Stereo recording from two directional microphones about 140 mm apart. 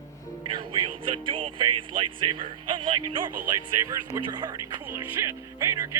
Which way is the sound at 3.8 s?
25° right (ahead or behind).